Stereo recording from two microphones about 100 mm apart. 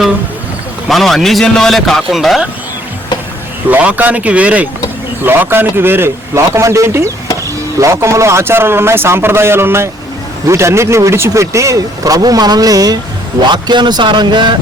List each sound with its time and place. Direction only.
0.9 s a man's voice: centre (ahead or behind)
3.7 s a man's voice: 15° right (ahead or behind); by 14.5 s 50° right (ahead or behind)